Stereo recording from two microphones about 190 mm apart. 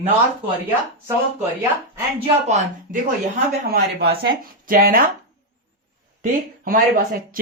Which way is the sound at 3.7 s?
55° right (ahead or behind).